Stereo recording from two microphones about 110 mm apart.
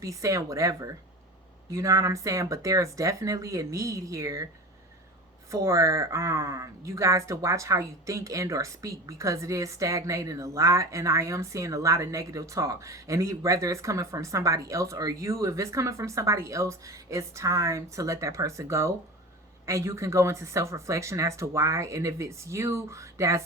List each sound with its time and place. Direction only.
0.0 s speech: 30° right (ahead or behind)
5.5 s speech: 30° right (ahead or behind)